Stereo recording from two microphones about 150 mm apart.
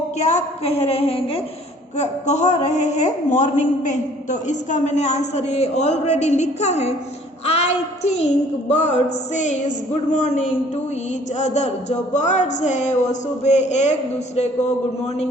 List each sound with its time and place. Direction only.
0.2 s a woman's voice: 50° left (ahead or behind)